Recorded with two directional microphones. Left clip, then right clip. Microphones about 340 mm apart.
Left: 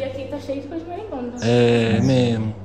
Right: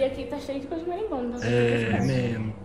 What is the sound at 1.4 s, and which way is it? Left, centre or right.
Speech, centre.